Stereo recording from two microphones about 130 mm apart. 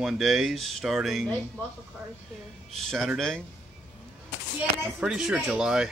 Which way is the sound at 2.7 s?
Centre (ahead or behind).